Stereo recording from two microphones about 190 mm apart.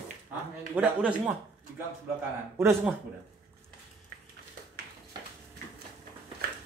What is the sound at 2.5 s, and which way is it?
Speech, 15° right (ahead or behind).